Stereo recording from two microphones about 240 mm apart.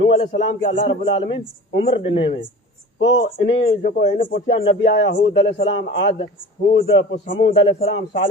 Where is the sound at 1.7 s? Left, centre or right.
Left.